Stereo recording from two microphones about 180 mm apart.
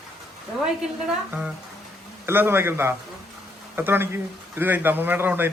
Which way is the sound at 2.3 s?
15° right (ahead or behind).